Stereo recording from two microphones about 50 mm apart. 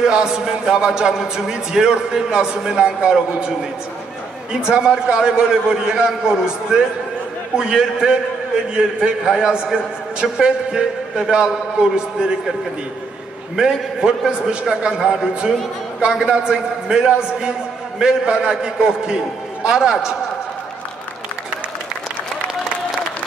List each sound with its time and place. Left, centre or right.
0.0 s a man's voice: centre
13.6 s a man's voice: centre